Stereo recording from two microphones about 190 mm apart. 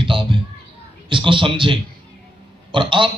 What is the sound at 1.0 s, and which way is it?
A man's voice, 25° right (ahead or behind).